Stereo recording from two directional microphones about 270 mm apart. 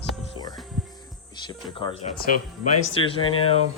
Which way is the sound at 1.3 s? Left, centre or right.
Centre.